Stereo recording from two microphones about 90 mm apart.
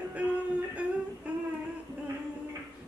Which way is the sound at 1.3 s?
15° right (ahead or behind).